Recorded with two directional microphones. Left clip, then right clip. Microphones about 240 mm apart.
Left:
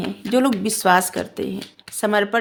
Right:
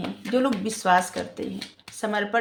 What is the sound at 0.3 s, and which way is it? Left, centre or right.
Speech, left.